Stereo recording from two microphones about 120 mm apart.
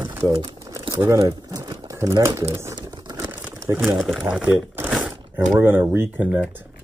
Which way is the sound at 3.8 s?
Centre (ahead or behind).